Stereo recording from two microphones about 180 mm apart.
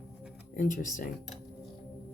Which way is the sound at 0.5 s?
45° left (ahead or behind).